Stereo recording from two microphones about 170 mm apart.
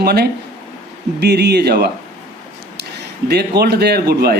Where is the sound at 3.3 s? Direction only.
75° right (ahead or behind).